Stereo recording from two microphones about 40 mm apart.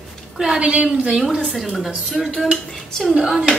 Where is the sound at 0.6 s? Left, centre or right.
Right.